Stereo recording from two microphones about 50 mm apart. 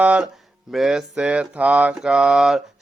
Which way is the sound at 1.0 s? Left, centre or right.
Centre.